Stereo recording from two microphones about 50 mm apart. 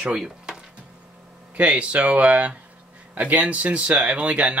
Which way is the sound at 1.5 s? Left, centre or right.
Right.